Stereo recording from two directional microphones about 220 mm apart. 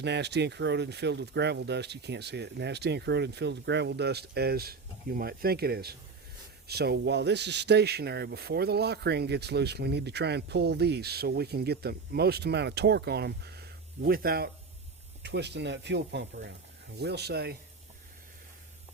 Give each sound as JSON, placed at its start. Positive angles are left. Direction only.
{"t": 0.0, "sound": "a man's voice", "side_deg": -50}